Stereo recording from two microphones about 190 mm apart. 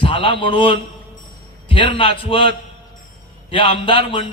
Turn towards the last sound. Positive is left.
turn(degrees=25)  # may be behind; listen again after turning